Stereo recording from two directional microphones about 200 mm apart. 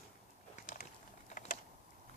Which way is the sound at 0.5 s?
40° left (ahead or behind).